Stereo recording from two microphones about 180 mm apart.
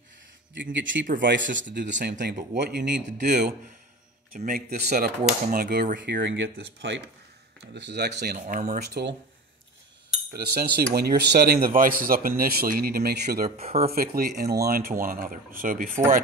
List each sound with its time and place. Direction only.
0.6 s speech: 90° right; by 3.5 s 65° right (ahead or behind)
4.3 s speech: 50° right (ahead or behind)
5.9 s speech: 75° right (ahead or behind)
7.7 s speech: 75° right (ahead or behind); by 8.8 s 40° right (ahead or behind)
10.3 s speech: 60° right (ahead or behind)
13.6 s speech: 35° right (ahead or behind)
13.9 s speech: 55° right (ahead or behind)